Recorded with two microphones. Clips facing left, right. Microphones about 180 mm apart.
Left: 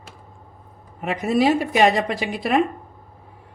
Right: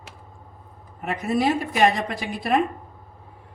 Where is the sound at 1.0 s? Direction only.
90° left.